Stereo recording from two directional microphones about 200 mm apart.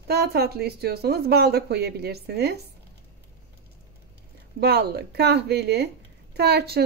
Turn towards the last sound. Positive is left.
turn(degrees=-55)  # may be behind; listen again after turning